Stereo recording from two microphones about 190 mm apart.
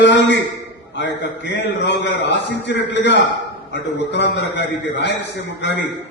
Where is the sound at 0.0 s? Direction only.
70° left (ahead or behind).